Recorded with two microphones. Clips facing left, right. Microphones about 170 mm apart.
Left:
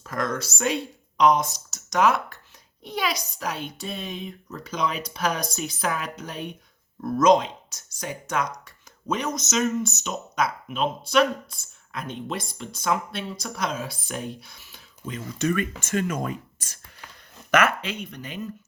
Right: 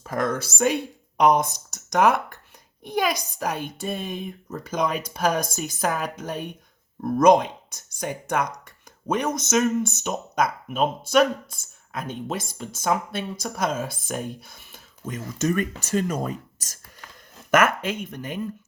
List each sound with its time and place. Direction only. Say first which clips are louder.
0.0 s speech: right 3 dB; 55° right (ahead or behind)